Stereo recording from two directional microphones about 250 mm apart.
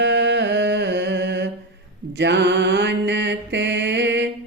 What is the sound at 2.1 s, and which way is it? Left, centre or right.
Mantra, right.